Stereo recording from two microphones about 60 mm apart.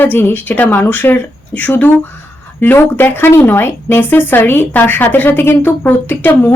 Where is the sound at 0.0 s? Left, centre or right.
Left.